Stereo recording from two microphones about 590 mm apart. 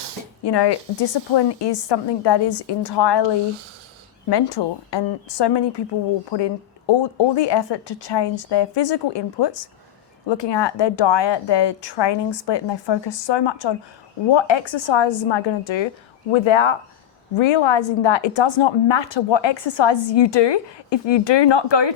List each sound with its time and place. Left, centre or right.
0.4 s a woman's voice: left
4.3 s a woman's voice: left